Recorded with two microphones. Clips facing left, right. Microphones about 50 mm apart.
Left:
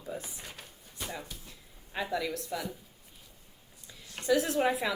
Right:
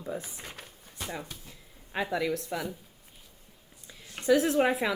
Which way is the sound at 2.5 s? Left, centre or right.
Right.